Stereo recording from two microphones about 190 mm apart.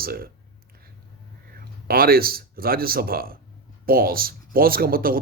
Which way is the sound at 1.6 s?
50° right (ahead or behind).